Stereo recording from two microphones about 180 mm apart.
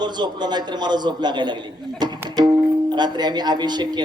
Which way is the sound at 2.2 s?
25° right (ahead or behind).